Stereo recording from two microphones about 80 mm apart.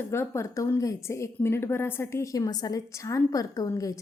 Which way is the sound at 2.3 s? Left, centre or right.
Left.